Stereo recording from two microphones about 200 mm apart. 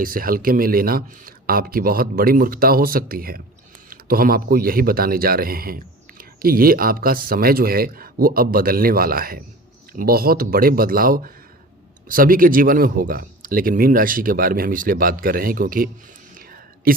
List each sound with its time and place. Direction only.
0.0 s a man's voice: 45° right (ahead or behind)